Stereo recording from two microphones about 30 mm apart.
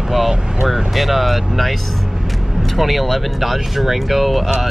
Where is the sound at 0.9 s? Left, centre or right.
Centre.